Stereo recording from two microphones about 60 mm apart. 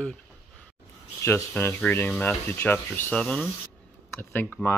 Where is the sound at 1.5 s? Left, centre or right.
Left.